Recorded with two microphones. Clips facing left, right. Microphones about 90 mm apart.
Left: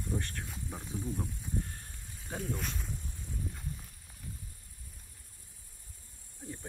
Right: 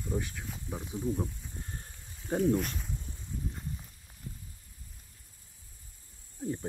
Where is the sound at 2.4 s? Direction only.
Centre (ahead or behind).